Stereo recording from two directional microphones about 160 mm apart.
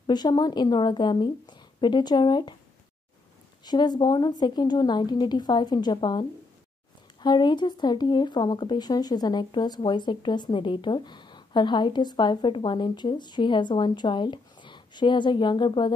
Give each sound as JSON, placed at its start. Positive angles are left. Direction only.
{"t": 0.0, "sound": "speech", "side_deg": 25}
{"t": 3.6, "sound": "speech", "side_deg": 25}